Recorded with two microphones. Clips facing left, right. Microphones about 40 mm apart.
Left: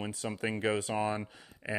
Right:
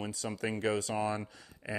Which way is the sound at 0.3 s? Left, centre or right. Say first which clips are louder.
Left 1 dB; left.